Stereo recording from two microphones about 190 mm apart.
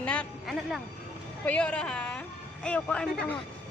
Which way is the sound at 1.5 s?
5° left (ahead or behind).